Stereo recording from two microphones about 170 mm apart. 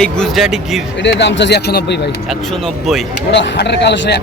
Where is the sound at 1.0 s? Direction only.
90° left.